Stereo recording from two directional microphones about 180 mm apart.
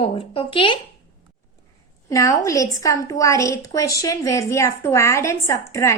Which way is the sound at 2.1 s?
20° left (ahead or behind).